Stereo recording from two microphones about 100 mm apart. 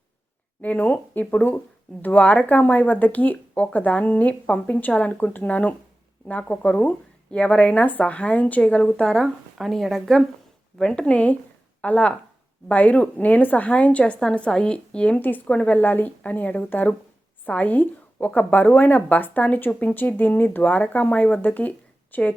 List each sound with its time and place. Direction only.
0.6 s speech: 15° left (ahead or behind)